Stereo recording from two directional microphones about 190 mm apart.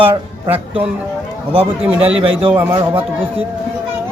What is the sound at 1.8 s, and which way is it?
A man's voice, 5° right (ahead or behind).